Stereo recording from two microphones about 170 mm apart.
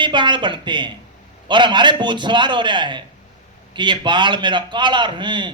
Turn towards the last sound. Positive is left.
turn(degrees=-25)  # may be behind; listen again after turning